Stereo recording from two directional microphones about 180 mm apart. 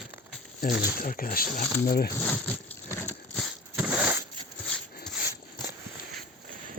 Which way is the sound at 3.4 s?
5° right (ahead or behind).